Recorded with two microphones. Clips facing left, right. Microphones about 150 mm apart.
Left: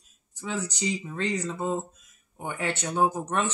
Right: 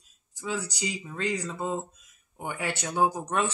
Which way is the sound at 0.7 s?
10° right (ahead or behind).